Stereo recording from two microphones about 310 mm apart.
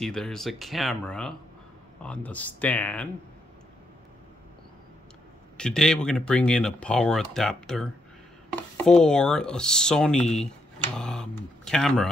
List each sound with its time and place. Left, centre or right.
0.0 s speech: centre
5.6 s speech: centre